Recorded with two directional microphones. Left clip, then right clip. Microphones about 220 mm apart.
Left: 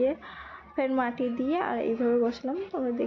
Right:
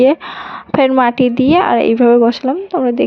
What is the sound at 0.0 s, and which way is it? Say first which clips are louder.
A woman's voice: right 16 dB; 45° right (ahead or behind).